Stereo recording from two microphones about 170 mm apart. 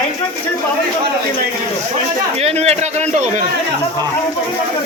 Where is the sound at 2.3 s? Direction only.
40° right (ahead or behind).